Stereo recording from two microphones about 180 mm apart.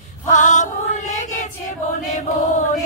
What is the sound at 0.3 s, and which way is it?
Music, 45° left (ahead or behind).